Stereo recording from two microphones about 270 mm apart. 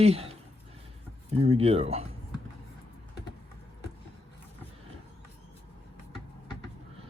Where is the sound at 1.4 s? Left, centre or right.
Right.